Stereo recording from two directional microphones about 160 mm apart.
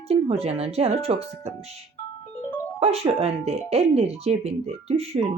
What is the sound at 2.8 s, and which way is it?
Speech, 40° right (ahead or behind).